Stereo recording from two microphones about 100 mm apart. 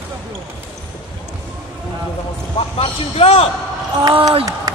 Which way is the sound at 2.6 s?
80° left.